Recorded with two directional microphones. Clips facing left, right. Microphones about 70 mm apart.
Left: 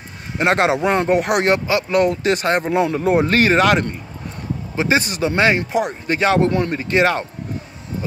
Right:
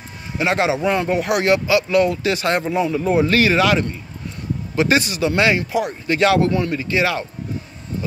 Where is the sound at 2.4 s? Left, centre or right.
Left.